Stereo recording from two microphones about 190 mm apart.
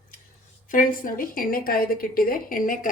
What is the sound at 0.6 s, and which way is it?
A woman's voice, 45° left (ahead or behind).